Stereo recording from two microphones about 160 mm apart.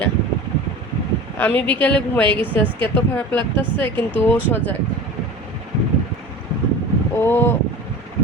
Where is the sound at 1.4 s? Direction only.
10° left (ahead or behind).